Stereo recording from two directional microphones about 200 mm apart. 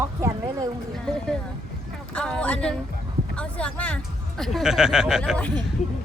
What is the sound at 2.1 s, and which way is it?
Vehicle, 5° left (ahead or behind).